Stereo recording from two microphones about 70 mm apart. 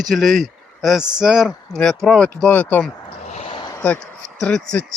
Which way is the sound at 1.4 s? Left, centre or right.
Centre.